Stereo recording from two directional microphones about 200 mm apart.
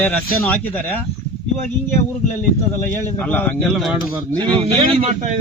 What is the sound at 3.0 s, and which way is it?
Speech, 10° left (ahead or behind).